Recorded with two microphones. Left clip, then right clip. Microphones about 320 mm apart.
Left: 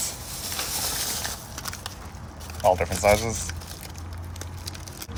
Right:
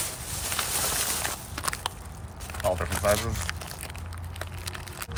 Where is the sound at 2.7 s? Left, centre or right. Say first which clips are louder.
Left 6 dB; centre.